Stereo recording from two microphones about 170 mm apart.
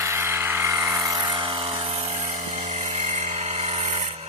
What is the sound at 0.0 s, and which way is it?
Helicopter, 15° right (ahead or behind).